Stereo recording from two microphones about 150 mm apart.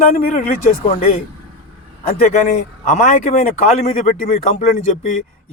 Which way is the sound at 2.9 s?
55° left (ahead or behind).